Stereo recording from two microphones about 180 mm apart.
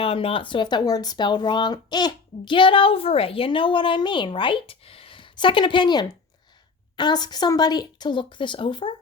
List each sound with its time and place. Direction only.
0.0 s speech: 30° left (ahead or behind)